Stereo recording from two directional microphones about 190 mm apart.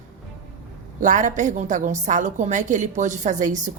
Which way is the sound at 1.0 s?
40° right (ahead or behind).